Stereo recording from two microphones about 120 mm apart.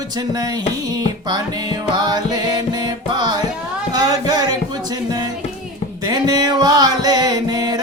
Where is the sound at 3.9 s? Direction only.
30° right (ahead or behind).